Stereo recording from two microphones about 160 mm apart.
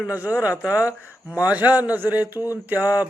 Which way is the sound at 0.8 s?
15° left (ahead or behind).